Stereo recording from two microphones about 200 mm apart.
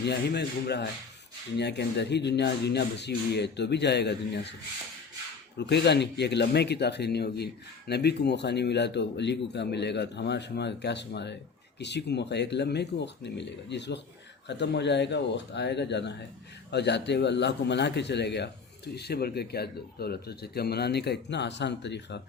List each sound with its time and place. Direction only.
0.0 s speech: 55° left (ahead or behind)
5.5 s a man's voice: 60° left (ahead or behind)